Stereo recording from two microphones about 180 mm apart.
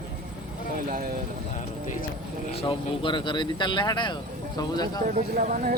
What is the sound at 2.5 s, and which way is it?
Speech, 30° left (ahead or behind).